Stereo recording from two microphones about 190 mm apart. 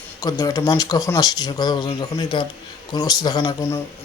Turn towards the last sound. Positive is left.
turn(degrees=15)  # may be behind; listen again after turning